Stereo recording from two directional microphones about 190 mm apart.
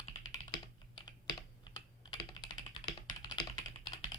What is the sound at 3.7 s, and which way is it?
Typing, 25° left (ahead or behind).